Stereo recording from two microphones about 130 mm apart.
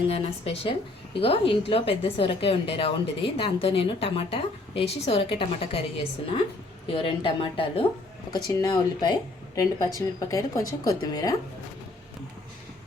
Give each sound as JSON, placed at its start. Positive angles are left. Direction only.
{"t": 0.1, "sound": "a woman's voice", "side_deg": 45}
{"t": 6.8, "sound": "a woman's voice", "side_deg": 45}